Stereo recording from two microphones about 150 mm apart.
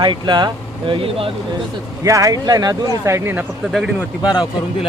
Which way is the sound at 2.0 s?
20° right (ahead or behind).